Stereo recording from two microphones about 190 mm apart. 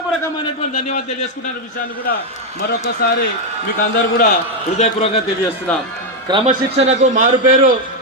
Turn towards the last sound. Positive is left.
turn(degrees=-45)  # may be behind; listen again after turning